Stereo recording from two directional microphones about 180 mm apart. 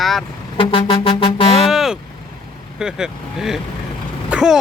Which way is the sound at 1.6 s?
5° right (ahead or behind).